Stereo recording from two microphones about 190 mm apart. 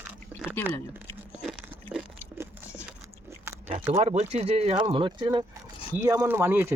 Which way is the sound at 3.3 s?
15° right (ahead or behind).